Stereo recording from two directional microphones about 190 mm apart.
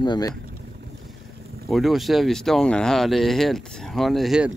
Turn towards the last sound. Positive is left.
turn(degrees=-5)  # may be behind; listen again after turning